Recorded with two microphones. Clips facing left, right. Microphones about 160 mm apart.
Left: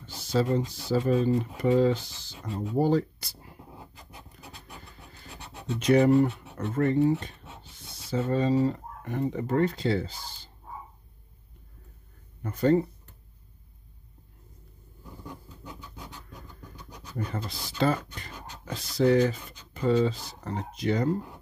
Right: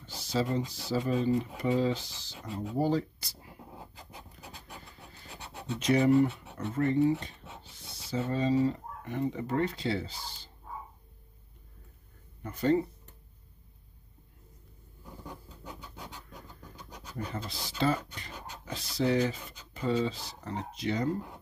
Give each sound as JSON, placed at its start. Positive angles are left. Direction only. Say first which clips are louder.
{"t": 0.3, "sound": "speech", "louder": "left 4 dB", "side_deg": 50}
{"t": 5.8, "sound": "speech", "louder": "left 3 dB", "side_deg": 50}
{"t": 12.5, "sound": "speech", "louder": "left 4 dB", "side_deg": 40}
{"t": 17.3, "sound": "speech", "louder": "left 3 dB", "side_deg": 45}